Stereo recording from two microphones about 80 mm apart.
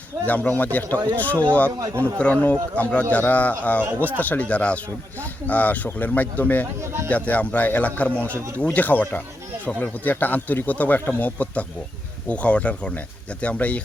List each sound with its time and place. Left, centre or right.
0.3 s speech: centre
6.8 s speech: right
7.3 s speech: centre